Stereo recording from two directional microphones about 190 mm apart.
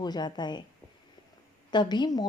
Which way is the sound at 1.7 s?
25° left (ahead or behind).